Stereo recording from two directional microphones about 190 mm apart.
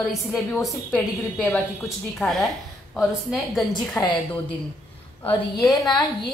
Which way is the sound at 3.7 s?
25° left (ahead or behind).